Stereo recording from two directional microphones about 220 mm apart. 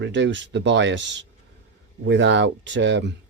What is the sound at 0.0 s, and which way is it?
Speech, 55° right (ahead or behind).